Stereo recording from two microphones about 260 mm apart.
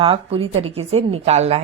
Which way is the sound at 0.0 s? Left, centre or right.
Right.